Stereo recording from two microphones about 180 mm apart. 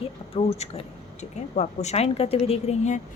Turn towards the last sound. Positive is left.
turn(degrees=40)  # may be behind; listen again after turning